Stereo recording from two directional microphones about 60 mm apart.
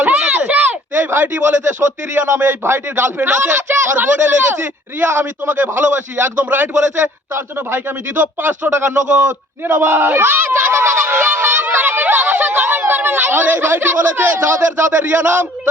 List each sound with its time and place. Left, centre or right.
0.0 s a sound: right
1.4 s a man's voice: right
2.1 s a man's voice: right
9.0 s a man's voice: right
9.7 s speech: right